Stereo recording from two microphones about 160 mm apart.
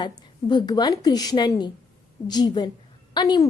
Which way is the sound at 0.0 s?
25° left (ahead or behind).